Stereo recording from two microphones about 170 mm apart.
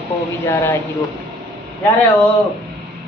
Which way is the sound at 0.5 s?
15° left (ahead or behind).